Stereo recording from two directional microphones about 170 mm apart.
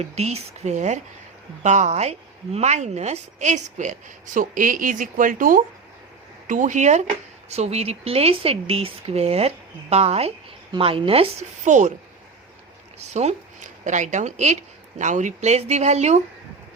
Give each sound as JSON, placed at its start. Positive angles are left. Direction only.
{"t": 0.0, "sound": "a woman's voice", "side_deg": -40}
{"t": 13.0, "sound": "a woman's voice", "side_deg": -40}